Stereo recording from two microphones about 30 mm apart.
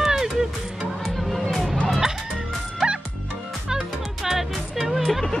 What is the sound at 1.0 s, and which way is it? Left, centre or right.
Music, centre.